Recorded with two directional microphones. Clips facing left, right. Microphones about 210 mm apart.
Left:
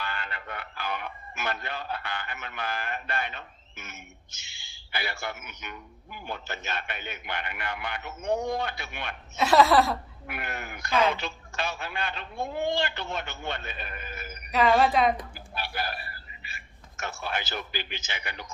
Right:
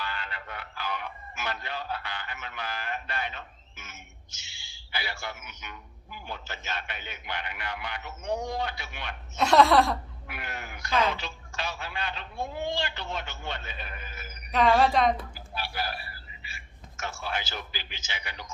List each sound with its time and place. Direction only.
0.0 s speech: 55° left (ahead or behind)
9.3 s speech: centre (ahead or behind)
10.2 s speech: 55° left (ahead or behind)
14.5 s speech: centre (ahead or behind)
15.5 s a man's voice: 55° left (ahead or behind)